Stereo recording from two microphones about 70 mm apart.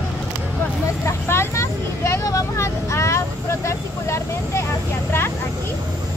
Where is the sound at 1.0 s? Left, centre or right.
Left.